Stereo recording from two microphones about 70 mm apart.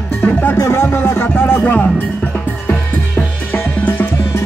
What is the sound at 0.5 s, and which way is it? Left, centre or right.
Music, left.